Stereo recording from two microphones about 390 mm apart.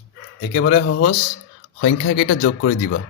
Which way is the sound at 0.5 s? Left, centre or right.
Left.